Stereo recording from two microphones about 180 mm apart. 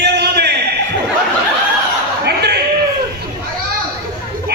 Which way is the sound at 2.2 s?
65° right (ahead or behind).